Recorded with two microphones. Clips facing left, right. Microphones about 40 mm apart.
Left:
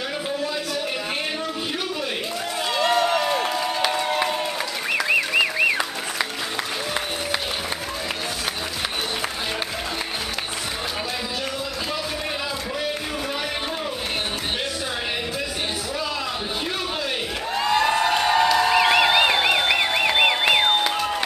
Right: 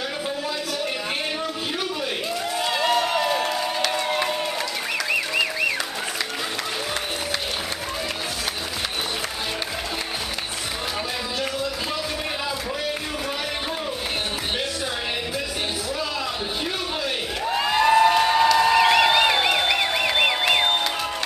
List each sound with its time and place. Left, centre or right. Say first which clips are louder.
2.6 s crowd: left 2 dB; centre
4.9 s music: left 4 dB; centre
17.5 s crowd: right 2 dB; centre